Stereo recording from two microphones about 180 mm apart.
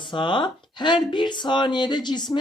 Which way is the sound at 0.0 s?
25° left (ahead or behind).